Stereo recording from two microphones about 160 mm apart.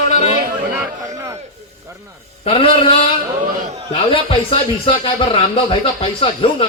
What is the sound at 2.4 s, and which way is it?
A man's voice, 35° left (ahead or behind).